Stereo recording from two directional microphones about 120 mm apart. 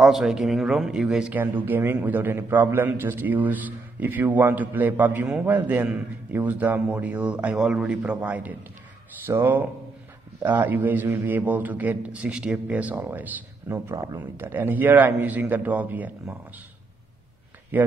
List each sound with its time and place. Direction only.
0.0 s a man's voice: centre (ahead or behind)
17.7 s a man's voice: 15° right (ahead or behind)